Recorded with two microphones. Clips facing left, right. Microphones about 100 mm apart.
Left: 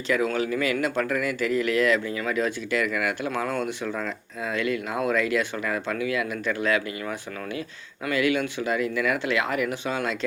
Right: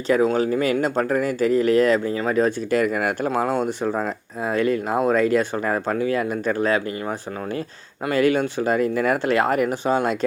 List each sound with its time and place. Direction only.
0.1 s speech: 35° right (ahead or behind)
8.0 s speech: 40° right (ahead or behind)